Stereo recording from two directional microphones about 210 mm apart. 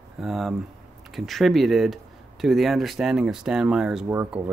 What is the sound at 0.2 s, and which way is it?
Speech, centre (ahead or behind).